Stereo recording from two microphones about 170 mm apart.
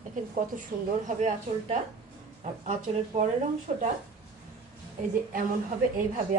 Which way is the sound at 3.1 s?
45° right (ahead or behind).